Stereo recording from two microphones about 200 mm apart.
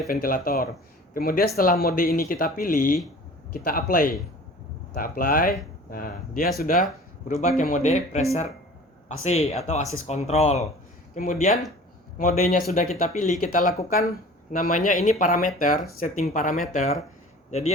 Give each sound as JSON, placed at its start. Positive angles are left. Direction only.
{"t": 0.1, "sound": "speech", "side_deg": 45}